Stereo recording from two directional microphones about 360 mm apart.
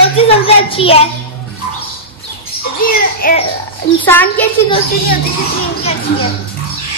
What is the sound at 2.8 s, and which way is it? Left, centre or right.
Speech, left.